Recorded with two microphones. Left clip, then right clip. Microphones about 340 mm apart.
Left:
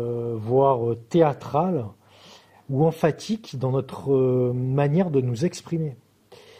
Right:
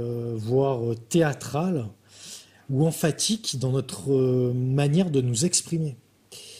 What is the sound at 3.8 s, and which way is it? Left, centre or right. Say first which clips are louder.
Speech: left 2 dB; left.